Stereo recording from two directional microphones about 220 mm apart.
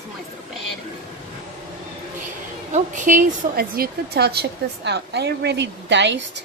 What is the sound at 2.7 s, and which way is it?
A woman's voice, 35° right (ahead or behind).